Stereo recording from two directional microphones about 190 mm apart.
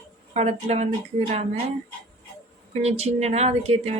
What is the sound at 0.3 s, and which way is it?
Speech, 35° right (ahead or behind).